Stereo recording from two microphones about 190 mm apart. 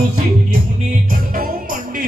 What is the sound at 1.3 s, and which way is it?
Music, 45° right (ahead or behind).